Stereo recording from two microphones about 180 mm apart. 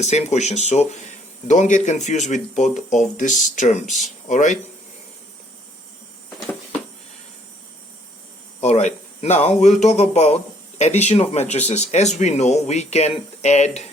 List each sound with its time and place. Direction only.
0.0 s speech: 40° left (ahead or behind)
8.6 s speech: 40° left (ahead or behind)